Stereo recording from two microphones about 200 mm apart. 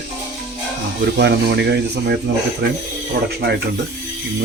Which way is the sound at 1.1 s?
55° right (ahead or behind).